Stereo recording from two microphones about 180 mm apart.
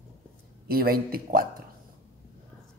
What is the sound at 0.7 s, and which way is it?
Speech, 55° right (ahead or behind).